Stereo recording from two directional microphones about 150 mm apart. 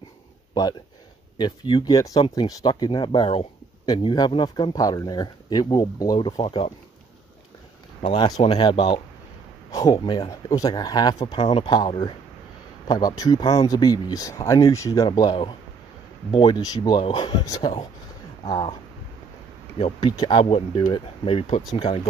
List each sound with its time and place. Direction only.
1.4 s speech: 30° left (ahead or behind)
8.4 s speech: 35° left (ahead or behind)
11.4 s speech: 35° left (ahead or behind)
19.8 s speech: 30° left (ahead or behind)